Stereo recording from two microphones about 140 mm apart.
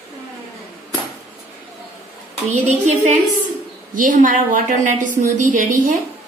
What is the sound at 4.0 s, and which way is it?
A woman's voice, 70° right (ahead or behind).